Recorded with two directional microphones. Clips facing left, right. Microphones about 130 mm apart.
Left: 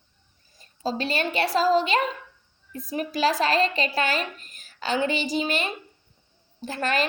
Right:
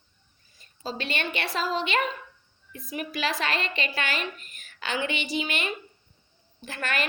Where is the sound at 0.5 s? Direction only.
40° left (ahead or behind).